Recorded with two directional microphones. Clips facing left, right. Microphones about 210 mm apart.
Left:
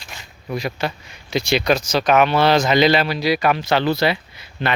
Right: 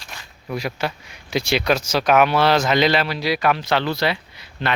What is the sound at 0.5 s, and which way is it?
Speech, 5° right (ahead or behind).